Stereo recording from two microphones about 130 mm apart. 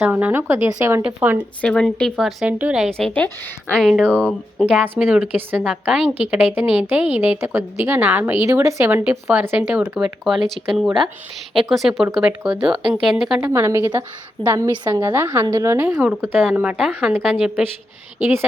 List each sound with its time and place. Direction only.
0.0 s a woman's voice: 10° right (ahead or behind)
1.6 s a woman's voice: 5° left (ahead or behind)
3.1 s a woman's voice: 15° left (ahead or behind)
3.8 s a woman's voice: centre (ahead or behind)
10.0 s a woman's voice: centre (ahead or behind)
13.4 s a woman's voice: 20° right (ahead or behind)